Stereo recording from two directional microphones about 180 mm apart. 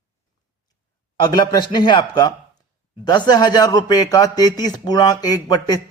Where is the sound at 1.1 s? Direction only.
25° left (ahead or behind).